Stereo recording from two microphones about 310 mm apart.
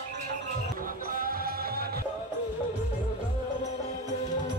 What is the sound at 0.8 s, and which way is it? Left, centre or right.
Music, right.